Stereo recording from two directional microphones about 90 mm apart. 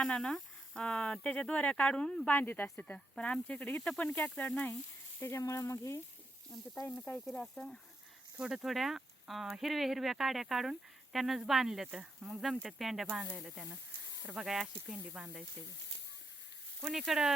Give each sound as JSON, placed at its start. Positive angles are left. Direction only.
{"t": 0.0, "sound": "speech", "side_deg": 10}
{"t": 2.2, "sound": "speech", "side_deg": 20}
{"t": 5.2, "sound": "frying", "side_deg": 30}
{"t": 7.3, "sound": "speech", "side_deg": 10}
{"t": 8.4, "sound": "speech", "side_deg": -5}
{"t": 14.9, "sound": "speech", "side_deg": -15}
{"t": 16.8, "sound": "speech", "side_deg": -5}